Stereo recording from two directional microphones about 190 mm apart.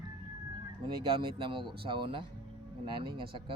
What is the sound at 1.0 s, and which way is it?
Speech, 25° right (ahead or behind).